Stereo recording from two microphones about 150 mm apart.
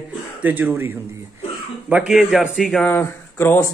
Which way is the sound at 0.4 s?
10° right (ahead or behind).